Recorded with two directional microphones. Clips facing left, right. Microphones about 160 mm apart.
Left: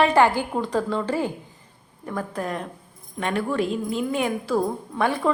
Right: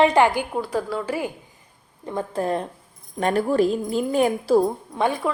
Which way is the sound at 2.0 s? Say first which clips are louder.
Right 4 dB; 25° right (ahead or behind).